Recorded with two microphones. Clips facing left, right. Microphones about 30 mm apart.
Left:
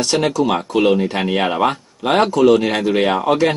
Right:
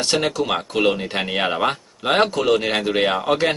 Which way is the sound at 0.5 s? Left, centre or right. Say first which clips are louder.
Left 4 dB; centre.